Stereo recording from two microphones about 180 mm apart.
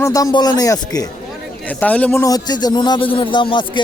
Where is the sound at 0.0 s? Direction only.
20° left (ahead or behind).